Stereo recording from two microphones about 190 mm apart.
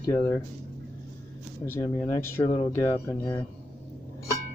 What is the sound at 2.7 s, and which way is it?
Speech, 15° left (ahead or behind).